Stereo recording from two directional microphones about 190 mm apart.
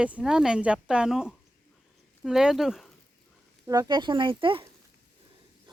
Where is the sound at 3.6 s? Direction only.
20° right (ahead or behind).